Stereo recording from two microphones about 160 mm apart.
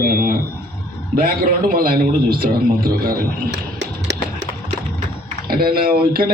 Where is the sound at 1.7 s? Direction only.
65° right (ahead or behind).